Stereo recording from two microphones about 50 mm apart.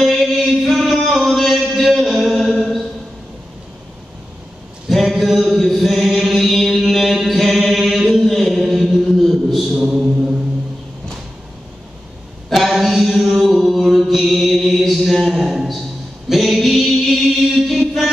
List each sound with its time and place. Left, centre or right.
0.0 s music: centre
4.8 s mantra: centre
9.8 s mantra: centre
12.4 s mantra: centre
15.4 s a sound: centre
16.3 s music: centre